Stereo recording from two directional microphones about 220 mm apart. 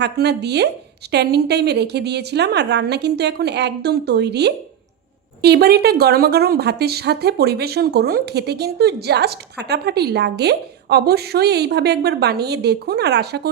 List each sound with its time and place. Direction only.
0.0 s a woman's voice: 50° right (ahead or behind)